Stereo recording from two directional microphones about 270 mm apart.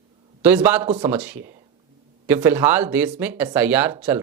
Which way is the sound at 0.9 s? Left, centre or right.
Centre.